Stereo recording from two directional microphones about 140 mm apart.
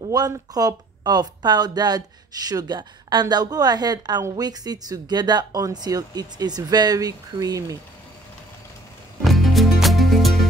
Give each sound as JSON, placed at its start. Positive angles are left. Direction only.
{"t": 0.1, "sound": "speech", "side_deg": -25}
{"t": 9.2, "sound": "music", "side_deg": 0}